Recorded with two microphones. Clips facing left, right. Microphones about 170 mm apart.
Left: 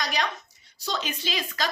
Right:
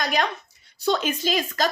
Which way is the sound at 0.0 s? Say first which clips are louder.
Right 4 dB; 50° right (ahead or behind).